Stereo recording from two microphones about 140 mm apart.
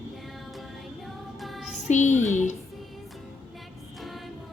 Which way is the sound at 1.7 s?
60° left (ahead or behind).